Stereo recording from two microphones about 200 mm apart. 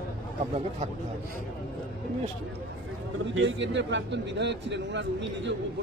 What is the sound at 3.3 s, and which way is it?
A man's voice, 65° right (ahead or behind).